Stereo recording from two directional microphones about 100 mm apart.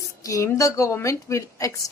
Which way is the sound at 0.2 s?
35° left (ahead or behind).